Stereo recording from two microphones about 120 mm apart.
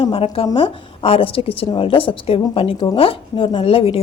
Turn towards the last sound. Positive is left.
turn(degrees=50)  # may be behind; listen again after turning